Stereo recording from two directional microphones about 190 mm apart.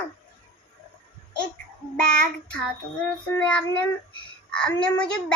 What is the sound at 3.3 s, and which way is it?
Child singing, 5° left (ahead or behind).